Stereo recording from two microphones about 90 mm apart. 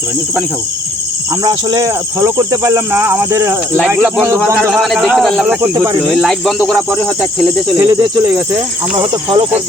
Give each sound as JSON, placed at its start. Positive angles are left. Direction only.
{"t": 1.5, "sound": "speech", "side_deg": -45}
{"t": 4.7, "sound": "speech", "side_deg": 0}
{"t": 7.8, "sound": "speech", "side_deg": -40}
{"t": 9.0, "sound": "cricket", "side_deg": -70}